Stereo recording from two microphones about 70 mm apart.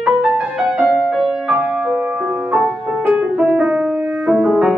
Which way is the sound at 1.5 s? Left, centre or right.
Centre.